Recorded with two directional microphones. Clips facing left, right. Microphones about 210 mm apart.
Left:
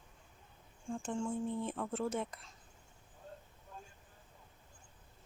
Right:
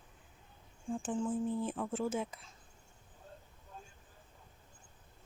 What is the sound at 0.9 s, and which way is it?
Speech, 5° right (ahead or behind).